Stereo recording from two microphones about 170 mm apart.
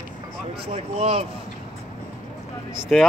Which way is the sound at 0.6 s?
35° right (ahead or behind).